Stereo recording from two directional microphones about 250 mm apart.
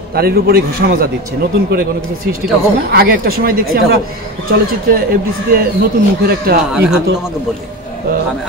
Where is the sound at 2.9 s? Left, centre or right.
Right.